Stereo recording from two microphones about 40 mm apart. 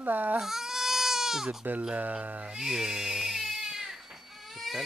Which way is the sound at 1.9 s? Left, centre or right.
Right.